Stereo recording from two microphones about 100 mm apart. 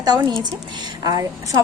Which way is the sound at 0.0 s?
45° right (ahead or behind).